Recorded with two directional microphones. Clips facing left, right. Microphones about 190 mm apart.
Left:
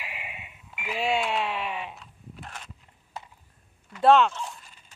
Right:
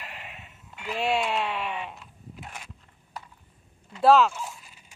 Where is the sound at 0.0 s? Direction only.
10° left (ahead or behind); by 2.7 s 10° right (ahead or behind).